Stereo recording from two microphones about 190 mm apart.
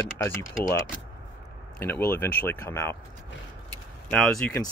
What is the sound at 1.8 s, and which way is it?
Speech, 10° left (ahead or behind).